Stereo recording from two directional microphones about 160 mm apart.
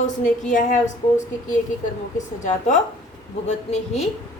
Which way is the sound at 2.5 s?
50° left (ahead or behind).